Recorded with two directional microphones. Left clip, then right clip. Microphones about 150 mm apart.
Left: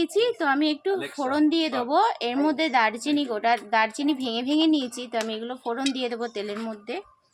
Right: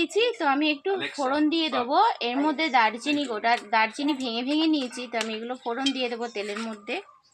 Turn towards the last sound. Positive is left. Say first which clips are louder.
# even
turn(degrees=5)  # may be behind; listen again after turning